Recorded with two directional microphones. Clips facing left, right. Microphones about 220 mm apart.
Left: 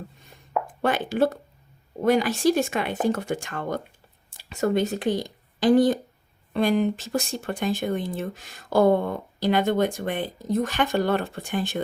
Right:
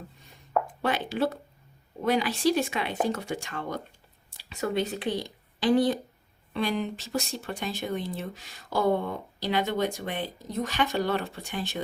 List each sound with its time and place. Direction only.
0.8 s speech: 50° left (ahead or behind)